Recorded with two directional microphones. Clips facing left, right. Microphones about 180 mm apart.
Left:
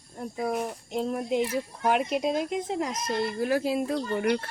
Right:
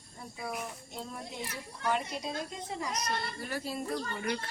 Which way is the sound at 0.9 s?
70° left (ahead or behind).